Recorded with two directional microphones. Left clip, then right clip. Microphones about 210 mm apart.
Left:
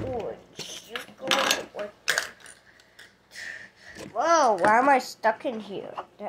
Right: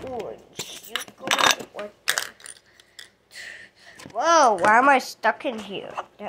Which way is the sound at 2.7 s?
40° right (ahead or behind).